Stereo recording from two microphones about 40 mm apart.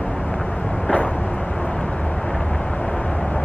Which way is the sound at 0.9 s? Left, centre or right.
Left.